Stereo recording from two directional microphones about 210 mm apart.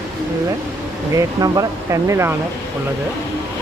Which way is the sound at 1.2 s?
15° right (ahead or behind).